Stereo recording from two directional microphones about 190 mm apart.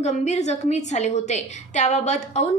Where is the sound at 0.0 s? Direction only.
35° left (ahead or behind).